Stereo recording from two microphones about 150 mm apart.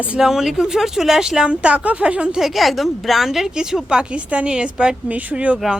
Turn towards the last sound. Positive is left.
turn(degrees=-5)  # may be behind; listen again after turning